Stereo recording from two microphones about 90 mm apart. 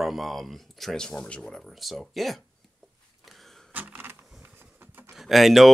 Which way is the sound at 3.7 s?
20° right (ahead or behind).